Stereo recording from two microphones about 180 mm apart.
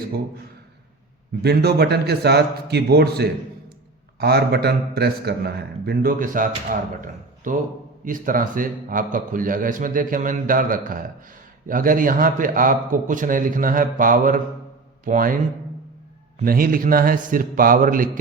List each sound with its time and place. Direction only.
1.4 s a man's voice: 65° right (ahead or behind)
16.4 s a man's voice: 50° right (ahead or behind)